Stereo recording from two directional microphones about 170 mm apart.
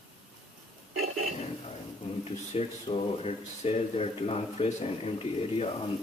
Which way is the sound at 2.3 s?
35° left (ahead or behind).